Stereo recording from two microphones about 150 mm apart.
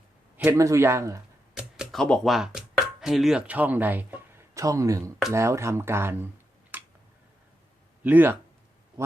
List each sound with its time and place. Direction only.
0.5 s speech: 20° right (ahead or behind)
1.5 s speech: 5° right (ahead or behind)
8.0 s speech: 10° right (ahead or behind)
9.0 s a sound: 20° right (ahead or behind)